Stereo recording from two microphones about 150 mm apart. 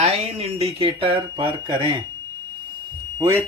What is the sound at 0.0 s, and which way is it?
Speech, 40° right (ahead or behind).